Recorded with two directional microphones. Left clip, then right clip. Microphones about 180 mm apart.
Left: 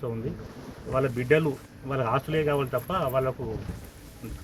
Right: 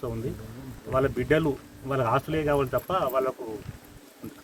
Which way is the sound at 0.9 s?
10° right (ahead or behind).